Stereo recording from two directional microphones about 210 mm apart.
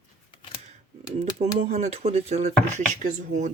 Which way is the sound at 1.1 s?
30° right (ahead or behind).